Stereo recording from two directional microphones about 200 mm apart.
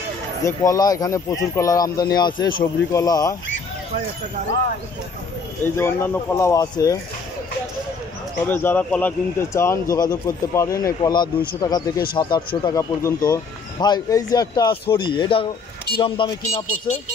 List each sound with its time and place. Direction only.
0.4 s speech: 15° left (ahead or behind)
5.8 s speech: 15° left (ahead or behind)
8.5 s speech: 10° left (ahead or behind); by 17.0 s 25° left (ahead or behind)